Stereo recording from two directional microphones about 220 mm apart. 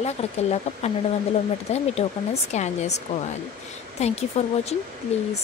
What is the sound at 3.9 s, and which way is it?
Speech, 30° left (ahead or behind).